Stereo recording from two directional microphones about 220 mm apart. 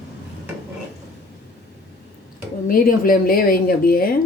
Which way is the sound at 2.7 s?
40° left (ahead or behind).